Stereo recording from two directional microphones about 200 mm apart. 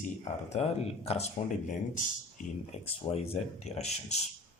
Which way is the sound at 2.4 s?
40° left (ahead or behind).